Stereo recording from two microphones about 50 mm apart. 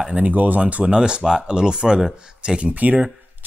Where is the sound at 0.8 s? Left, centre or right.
Centre.